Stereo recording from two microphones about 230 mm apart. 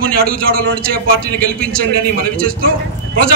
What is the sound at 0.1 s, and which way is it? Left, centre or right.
Speech, right.